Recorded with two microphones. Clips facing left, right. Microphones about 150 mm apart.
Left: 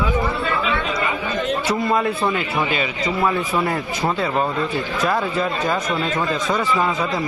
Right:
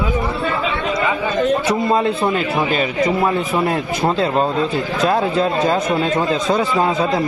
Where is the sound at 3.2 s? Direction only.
25° right (ahead or behind).